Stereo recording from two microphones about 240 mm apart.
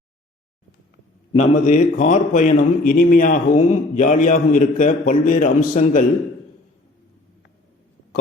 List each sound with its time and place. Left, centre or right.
1.3 s a man's voice: left